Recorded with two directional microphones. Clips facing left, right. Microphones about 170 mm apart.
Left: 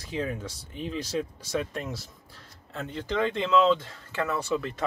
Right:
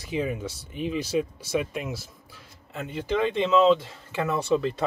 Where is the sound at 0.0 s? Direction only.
10° right (ahead or behind).